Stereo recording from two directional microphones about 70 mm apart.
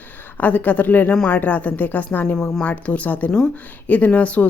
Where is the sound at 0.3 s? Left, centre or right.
Left.